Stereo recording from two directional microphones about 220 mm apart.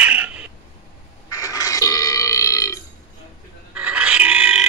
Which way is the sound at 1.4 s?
15° left (ahead or behind).